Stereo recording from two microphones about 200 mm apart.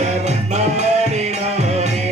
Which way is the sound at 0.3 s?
35° right (ahead or behind).